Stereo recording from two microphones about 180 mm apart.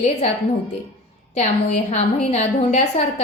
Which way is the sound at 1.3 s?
35° left (ahead or behind).